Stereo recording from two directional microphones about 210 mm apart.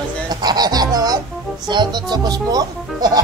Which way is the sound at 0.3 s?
20° right (ahead or behind).